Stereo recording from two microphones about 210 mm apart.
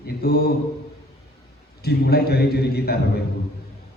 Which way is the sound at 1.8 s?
50° left (ahead or behind).